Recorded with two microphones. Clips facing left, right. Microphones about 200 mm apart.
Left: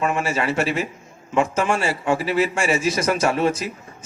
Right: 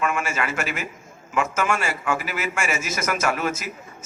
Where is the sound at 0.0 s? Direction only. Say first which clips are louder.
Left 3 dB; 30° left (ahead or behind).